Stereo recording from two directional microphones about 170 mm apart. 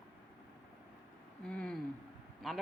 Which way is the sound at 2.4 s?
Centre (ahead or behind).